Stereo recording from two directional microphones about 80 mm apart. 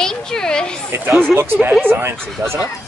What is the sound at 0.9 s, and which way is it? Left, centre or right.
Speech, right.